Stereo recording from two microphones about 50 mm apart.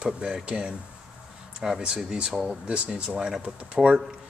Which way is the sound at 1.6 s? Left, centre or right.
Centre.